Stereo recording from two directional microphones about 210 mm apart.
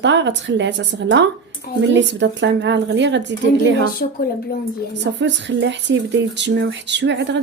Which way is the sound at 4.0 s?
45° left (ahead or behind).